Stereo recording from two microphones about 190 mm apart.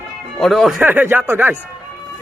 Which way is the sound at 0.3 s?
Centre (ahead or behind).